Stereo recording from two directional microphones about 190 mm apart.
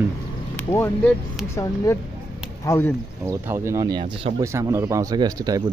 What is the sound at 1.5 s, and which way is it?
Speech, 15° left (ahead or behind).